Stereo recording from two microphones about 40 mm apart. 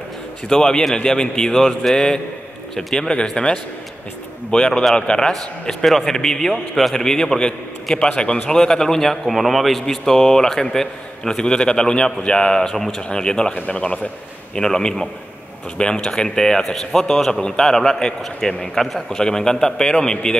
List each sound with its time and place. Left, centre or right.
0.5 s a man's voice: centre
3.1 s a man's voice: left
12.6 s a man's voice: centre
13.1 s speech: left
14.5 s a man's voice: centre
19.1 s a man's voice: centre